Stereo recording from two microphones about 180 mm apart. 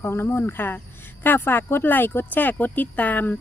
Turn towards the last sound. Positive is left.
turn(degrees=10)  # may be behind; listen again after turning